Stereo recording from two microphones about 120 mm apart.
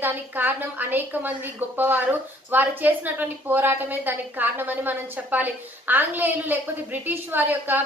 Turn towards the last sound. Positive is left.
turn(degrees=-15)  # may be behind; listen again after turning